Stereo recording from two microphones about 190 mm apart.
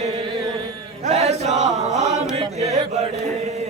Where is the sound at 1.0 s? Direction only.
35° right (ahead or behind).